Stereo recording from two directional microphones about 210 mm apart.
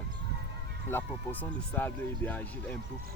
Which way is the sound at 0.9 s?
10° left (ahead or behind).